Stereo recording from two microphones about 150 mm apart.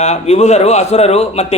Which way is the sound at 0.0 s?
45° left (ahead or behind).